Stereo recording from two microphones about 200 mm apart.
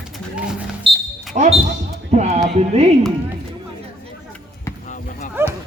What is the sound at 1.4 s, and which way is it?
Speech, 30° right (ahead or behind).